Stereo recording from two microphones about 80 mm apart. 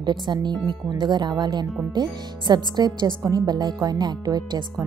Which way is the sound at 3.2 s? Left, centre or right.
Right.